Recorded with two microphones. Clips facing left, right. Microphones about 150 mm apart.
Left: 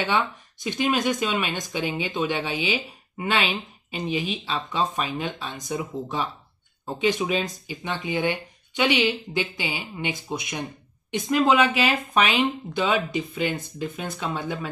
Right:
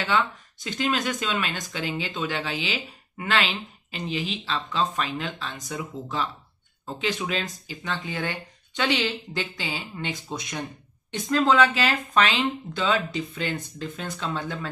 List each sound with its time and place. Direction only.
0.7 s speech: 15° left (ahead or behind)